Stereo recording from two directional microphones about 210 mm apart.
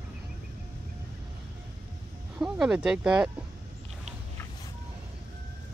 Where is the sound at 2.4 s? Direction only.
5° right (ahead or behind).